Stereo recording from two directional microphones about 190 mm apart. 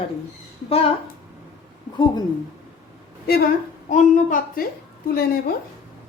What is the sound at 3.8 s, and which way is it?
Speech, 40° left (ahead or behind).